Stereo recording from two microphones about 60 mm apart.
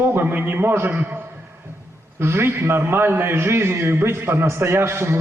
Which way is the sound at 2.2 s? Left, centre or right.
Right.